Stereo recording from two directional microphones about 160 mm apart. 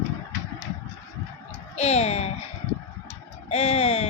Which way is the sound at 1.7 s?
40° left (ahead or behind).